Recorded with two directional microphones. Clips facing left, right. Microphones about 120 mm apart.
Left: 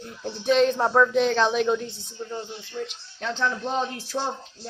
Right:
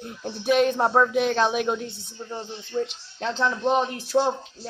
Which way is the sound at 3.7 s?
90° right.